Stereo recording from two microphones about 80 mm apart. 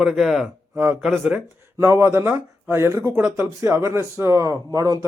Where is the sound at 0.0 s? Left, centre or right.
Centre.